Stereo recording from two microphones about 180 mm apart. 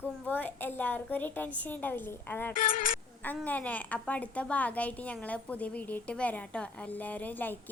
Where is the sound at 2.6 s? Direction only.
50° left (ahead or behind).